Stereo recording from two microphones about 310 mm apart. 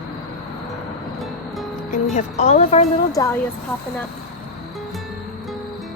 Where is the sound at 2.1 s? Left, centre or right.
Left.